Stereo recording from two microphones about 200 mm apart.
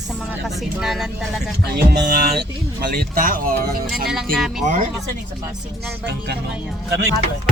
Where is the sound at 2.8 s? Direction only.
50° right (ahead or behind).